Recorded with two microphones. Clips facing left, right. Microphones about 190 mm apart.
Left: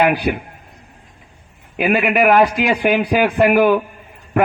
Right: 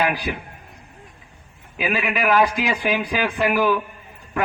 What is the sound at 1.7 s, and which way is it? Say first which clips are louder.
A man's voice: left 8 dB; 55° left (ahead or behind).